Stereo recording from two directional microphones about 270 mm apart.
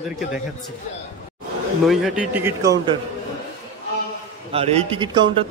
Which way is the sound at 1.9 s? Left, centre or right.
Centre.